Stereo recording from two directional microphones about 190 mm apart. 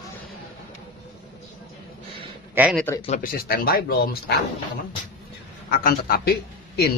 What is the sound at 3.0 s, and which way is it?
Speech, 35° left (ahead or behind).